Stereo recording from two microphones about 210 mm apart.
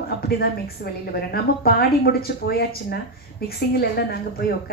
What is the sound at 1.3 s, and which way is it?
A woman's voice, 45° left (ahead or behind).